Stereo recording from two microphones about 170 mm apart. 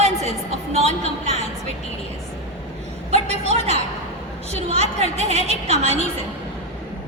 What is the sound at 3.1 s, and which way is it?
A woman's voice, 40° right (ahead or behind).